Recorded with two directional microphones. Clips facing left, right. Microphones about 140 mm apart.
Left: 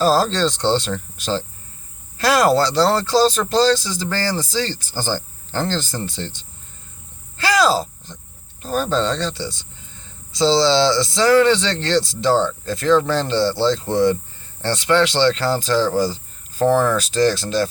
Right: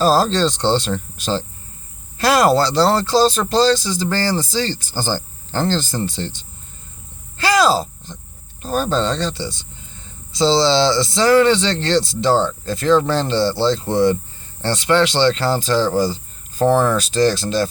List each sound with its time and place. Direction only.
0.0 s speech: 25° right (ahead or behind)
7.3 s a sound: 25° right (ahead or behind)
8.6 s speech: 25° right (ahead or behind)